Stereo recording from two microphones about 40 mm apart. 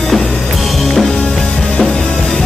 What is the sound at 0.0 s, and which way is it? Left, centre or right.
Music, centre.